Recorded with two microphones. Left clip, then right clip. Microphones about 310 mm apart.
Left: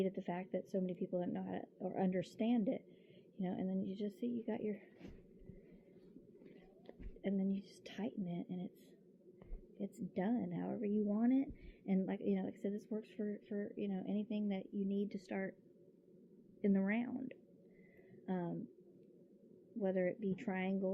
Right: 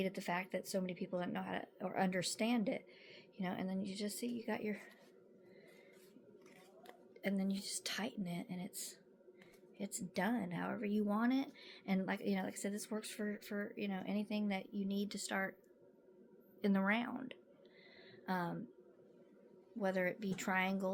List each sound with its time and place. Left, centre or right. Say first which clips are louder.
0.0 s speech: right 1 dB; centre
7.2 s speech: even; centre
9.8 s speech: right 2 dB; centre
14.6 s speech: left 1 dB; right
15.1 s speech: right 4 dB; centre
16.6 s a woman's voice: right 2 dB; centre
19.8 s speech: even; centre